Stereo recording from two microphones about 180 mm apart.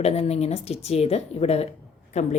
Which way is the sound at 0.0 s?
35° left (ahead or behind).